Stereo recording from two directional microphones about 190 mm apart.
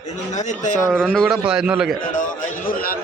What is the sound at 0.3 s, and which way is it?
Speech, 40° left (ahead or behind).